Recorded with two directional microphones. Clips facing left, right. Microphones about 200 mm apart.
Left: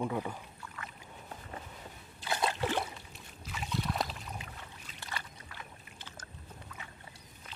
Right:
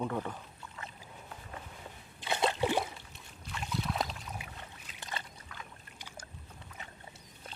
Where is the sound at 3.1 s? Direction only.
Centre (ahead or behind).